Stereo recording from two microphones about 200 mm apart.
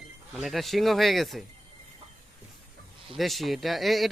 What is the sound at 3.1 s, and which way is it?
Speech, centre (ahead or behind).